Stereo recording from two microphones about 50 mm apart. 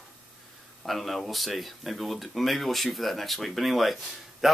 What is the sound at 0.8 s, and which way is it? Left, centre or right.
Speech, centre.